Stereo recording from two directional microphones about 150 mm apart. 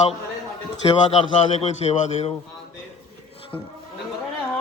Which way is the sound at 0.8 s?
40° left (ahead or behind).